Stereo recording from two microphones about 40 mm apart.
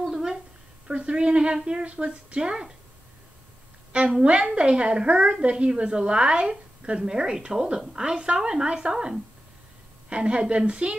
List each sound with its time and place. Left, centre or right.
0.1 s a sound: centre
0.8 s a woman's voice: right
3.9 s a woman's voice: right
8.4 s a woman's voice: centre